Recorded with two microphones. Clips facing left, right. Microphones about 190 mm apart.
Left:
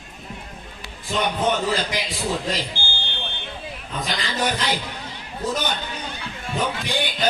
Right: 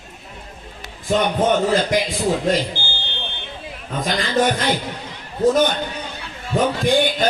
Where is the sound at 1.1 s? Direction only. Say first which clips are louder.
Right 6 dB; 50° right (ahead or behind).